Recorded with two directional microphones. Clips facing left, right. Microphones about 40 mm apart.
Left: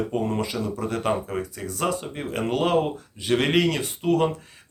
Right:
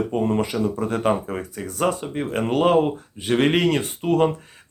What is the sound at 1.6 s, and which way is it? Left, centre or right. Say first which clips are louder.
Speech: right 5 dB; right.